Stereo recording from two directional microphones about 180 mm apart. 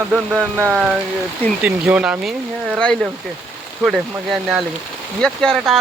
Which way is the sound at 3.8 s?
Centre (ahead or behind).